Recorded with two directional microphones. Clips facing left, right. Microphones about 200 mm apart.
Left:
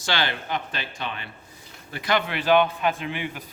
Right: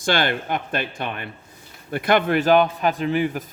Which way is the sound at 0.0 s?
50° right (ahead or behind).